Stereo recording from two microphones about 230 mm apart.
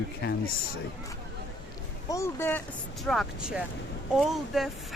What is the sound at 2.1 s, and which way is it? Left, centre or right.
Speech, centre.